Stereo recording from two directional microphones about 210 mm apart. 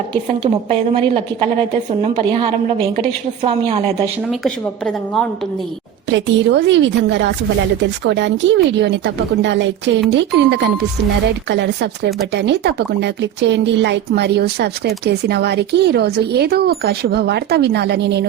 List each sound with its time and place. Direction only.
0.1 s a woman's voice: 25° right (ahead or behind)
4.3 s a woman's voice: 5° left (ahead or behind)
6.1 s a woman's voice: 60° right (ahead or behind)